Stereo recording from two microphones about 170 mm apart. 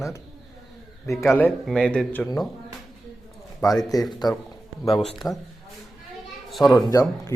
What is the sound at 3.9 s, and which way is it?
Speech, 20° left (ahead or behind).